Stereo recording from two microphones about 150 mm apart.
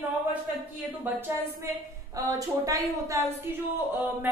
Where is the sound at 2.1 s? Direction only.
20° right (ahead or behind).